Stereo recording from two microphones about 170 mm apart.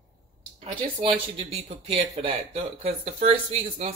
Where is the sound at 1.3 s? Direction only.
35° right (ahead or behind).